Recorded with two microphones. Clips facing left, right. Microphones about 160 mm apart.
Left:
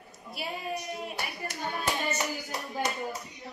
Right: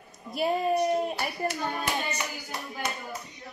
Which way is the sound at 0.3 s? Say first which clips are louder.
Right 10 dB; 45° right (ahead or behind).